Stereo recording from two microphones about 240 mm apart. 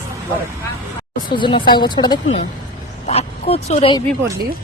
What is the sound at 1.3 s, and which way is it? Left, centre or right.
Speech, centre.